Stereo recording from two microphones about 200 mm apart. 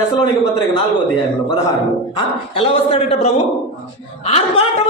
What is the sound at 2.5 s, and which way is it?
Speech, 30° left (ahead or behind).